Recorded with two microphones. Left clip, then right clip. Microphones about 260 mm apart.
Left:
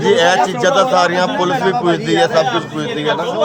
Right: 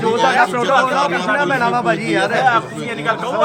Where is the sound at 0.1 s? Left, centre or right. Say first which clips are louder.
Left 3 dB; centre.